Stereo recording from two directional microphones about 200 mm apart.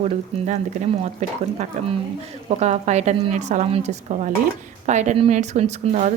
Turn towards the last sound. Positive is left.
turn(degrees=-35)  # may be behind; listen again after turning